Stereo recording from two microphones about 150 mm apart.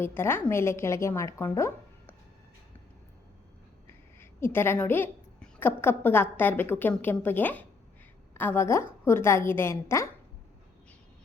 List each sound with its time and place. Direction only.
0.0 s a woman's voice: 15° left (ahead or behind)
4.2 s a woman's voice: 15° left (ahead or behind)